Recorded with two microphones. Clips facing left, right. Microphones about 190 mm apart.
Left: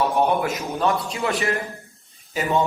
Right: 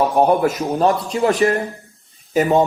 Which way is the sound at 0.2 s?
40° right (ahead or behind).